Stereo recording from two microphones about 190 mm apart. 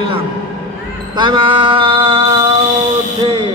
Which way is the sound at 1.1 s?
25° right (ahead or behind).